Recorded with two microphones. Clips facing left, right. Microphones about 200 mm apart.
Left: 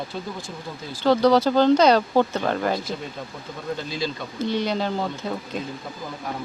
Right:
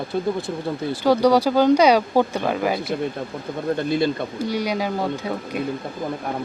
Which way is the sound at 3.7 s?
55° right (ahead or behind).